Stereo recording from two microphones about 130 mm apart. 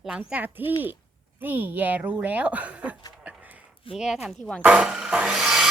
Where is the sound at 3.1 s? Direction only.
5° right (ahead or behind).